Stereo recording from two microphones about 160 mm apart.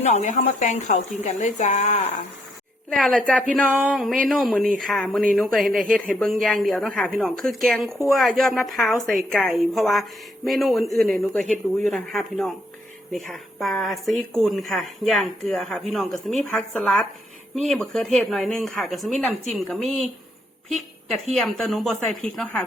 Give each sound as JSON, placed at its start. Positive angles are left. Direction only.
{"t": 0.0, "sound": "speech", "side_deg": 45}
{"t": 2.9, "sound": "speech", "side_deg": 5}